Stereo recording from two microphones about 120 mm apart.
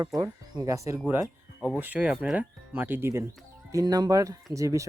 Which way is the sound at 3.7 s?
35° right (ahead or behind).